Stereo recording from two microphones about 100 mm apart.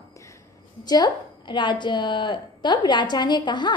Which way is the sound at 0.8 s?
40° left (ahead or behind).